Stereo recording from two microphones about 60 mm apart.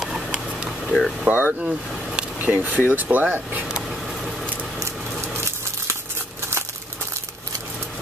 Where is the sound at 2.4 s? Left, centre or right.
Right.